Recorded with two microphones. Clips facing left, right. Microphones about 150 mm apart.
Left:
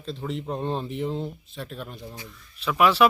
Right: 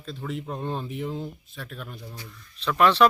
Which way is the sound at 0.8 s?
Centre (ahead or behind).